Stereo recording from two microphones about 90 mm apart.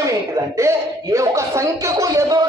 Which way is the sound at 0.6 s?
30° right (ahead or behind).